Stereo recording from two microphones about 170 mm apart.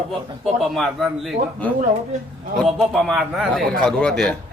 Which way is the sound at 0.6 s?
Centre (ahead or behind).